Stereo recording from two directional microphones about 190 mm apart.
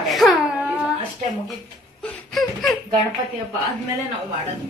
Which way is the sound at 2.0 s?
Centre (ahead or behind).